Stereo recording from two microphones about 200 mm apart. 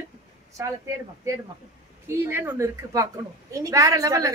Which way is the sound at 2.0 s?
10° right (ahead or behind).